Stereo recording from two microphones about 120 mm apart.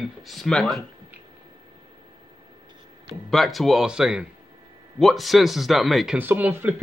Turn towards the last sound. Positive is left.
turn(degrees=-15)  # may be behind; listen again after turning